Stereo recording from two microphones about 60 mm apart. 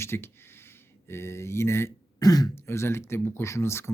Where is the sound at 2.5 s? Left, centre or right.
Left.